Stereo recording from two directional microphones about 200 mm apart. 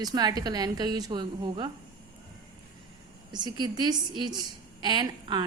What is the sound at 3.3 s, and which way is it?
A woman's voice, 20° right (ahead or behind).